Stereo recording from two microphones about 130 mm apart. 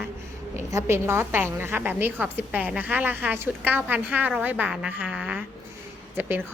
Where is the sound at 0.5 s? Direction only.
20° right (ahead or behind).